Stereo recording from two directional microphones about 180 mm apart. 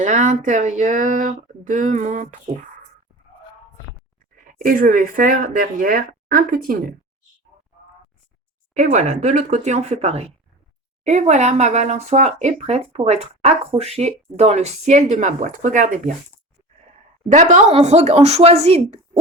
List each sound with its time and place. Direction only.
0.0 s speech: 40° right (ahead or behind)
4.5 s speech: 50° right (ahead or behind)
8.7 s speech: 40° right (ahead or behind)
17.2 s speech: 45° right (ahead or behind)